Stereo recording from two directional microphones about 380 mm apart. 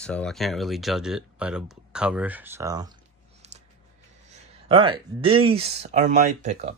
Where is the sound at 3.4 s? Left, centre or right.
Centre.